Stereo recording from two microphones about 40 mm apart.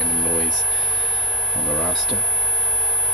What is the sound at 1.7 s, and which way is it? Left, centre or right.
Speech, centre.